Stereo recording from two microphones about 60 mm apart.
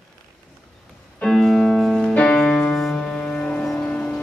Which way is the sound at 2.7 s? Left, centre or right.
Centre.